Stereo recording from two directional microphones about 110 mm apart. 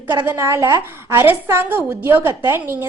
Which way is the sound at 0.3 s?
25° right (ahead or behind).